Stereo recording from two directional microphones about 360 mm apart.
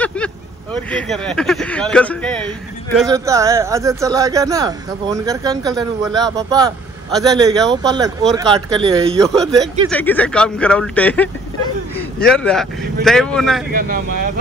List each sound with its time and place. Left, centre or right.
0.0 s vehicle: centre
0.8 s speech: centre
3.0 s speech: centre
9.2 s speech: centre
13.7 s speech: right